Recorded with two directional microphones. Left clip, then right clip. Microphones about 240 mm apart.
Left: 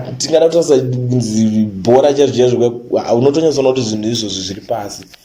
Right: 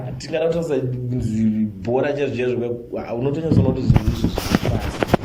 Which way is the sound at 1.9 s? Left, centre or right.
Left.